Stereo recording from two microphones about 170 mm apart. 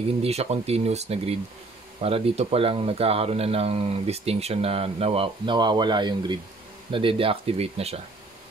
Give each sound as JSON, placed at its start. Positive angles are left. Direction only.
{"t": 0.2, "sound": "speech", "side_deg": -35}